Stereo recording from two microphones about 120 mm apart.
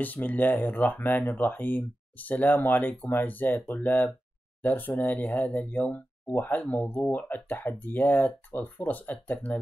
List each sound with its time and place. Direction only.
0.0 s speech: 15° left (ahead or behind)